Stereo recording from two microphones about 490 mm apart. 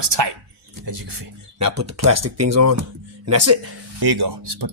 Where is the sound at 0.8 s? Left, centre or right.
Right.